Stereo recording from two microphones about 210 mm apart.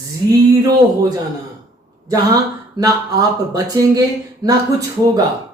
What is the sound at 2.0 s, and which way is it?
Speech, 15° right (ahead or behind).